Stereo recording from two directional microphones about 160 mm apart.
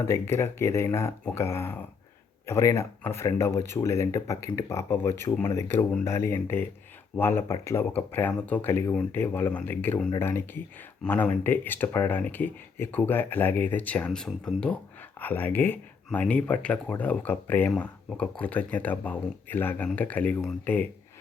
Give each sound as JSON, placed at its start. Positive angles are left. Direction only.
{"t": 0.1, "sound": "speech", "side_deg": 15}